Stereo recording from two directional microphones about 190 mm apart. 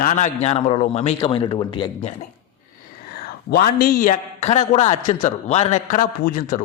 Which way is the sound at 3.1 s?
55° left (ahead or behind).